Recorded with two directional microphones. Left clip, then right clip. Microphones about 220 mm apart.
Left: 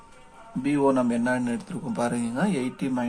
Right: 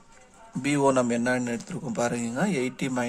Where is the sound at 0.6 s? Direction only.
40° right (ahead or behind).